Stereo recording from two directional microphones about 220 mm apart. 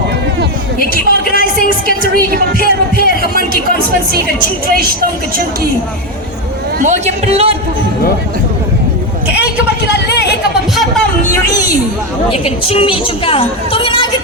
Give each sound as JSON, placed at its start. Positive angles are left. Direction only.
{"t": 0.8, "sound": "a sound", "side_deg": 40}
{"t": 2.1, "sound": "a woman's voice", "side_deg": -45}
{"t": 2.9, "sound": "music", "side_deg": 45}
{"t": 6.8, "sound": "speech", "side_deg": -30}
{"t": 9.9, "sound": "a sound", "side_deg": 50}
{"t": 12.3, "sound": "a woman's voice", "side_deg": 25}